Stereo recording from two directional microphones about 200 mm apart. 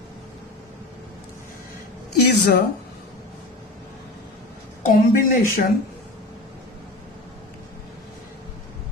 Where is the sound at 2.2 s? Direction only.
55° left (ahead or behind).